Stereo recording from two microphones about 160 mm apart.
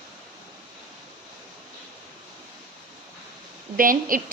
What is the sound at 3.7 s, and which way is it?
Speech, 60° right (ahead or behind).